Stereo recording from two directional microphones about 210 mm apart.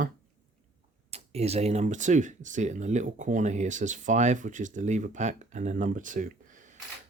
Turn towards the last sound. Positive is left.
turn(degrees=-40)  # may be behind; listen again after turning